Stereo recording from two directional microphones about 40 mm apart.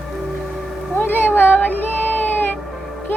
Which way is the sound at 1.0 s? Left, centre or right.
Left.